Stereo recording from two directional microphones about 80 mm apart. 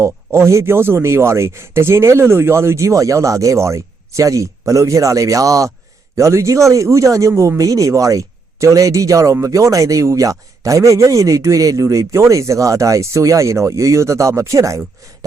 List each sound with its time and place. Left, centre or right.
0.0 s a man's voice: right